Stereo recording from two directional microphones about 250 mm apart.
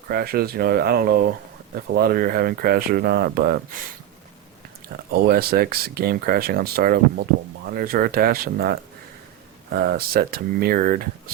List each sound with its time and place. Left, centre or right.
0.1 s speech: right
5.1 s speech: right